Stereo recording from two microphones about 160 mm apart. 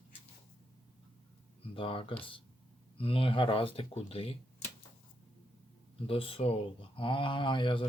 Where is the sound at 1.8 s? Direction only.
35° left (ahead or behind).